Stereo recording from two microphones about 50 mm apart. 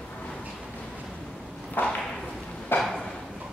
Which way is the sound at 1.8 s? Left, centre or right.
Left.